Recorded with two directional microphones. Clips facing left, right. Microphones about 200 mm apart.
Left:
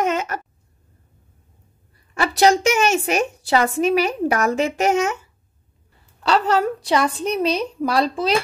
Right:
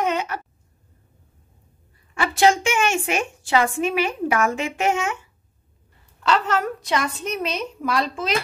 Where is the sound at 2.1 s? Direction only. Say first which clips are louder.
Left 2 dB; 40° left (ahead or behind).